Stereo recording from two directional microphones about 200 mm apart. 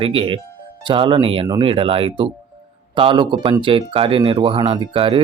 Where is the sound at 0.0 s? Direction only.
25° right (ahead or behind).